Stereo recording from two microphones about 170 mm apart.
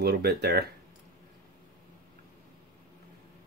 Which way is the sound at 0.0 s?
70° right (ahead or behind).